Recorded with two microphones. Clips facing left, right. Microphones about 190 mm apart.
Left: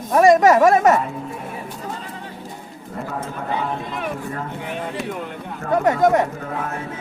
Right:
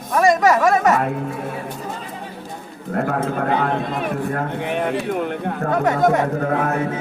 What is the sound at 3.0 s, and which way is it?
A man's voice, 70° right (ahead or behind).